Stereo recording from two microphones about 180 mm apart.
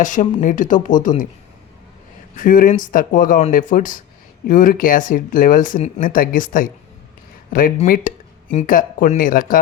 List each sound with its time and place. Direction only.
0.0 s speech: 45° left (ahead or behind)
2.3 s speech: 50° left (ahead or behind)
7.9 s speech: 50° left (ahead or behind)